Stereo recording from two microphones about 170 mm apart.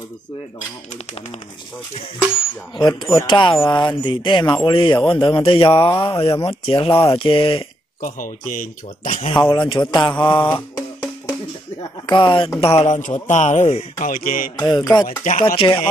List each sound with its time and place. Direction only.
3.3 s a man's voice: 30° left (ahead or behind)
6.1 s speech: 15° left (ahead or behind)
6.4 s speech: 30° left (ahead or behind)
8.0 s speech: 50° left (ahead or behind)
9.0 s a man's voice: 35° left (ahead or behind)
10.5 s music: 10° left (ahead or behind)
12.1 s a man's voice: 25° left (ahead or behind); by 14.5 s 55° left (ahead or behind)
14.7 s a man's voice: 25° left (ahead or behind)
15.0 s speech: 50° left (ahead or behind)
15.5 s speech: 30° left (ahead or behind)